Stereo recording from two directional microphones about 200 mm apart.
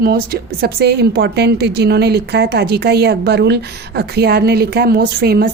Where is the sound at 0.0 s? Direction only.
50° right (ahead or behind).